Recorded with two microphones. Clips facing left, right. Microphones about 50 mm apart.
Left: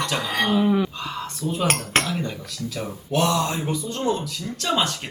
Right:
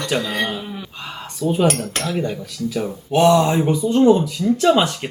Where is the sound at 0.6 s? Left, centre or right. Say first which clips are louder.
Left 11 dB; left.